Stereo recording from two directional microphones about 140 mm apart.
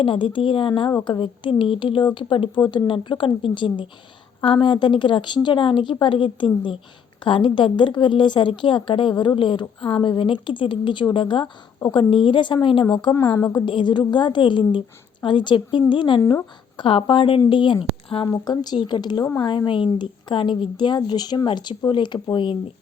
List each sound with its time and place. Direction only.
0.0 s a woman's voice: 35° left (ahead or behind)
13.2 s a woman's voice: 20° left (ahead or behind)
13.7 s a woman's voice: 35° left (ahead or behind)
18.3 s a woman's voice: 25° left (ahead or behind)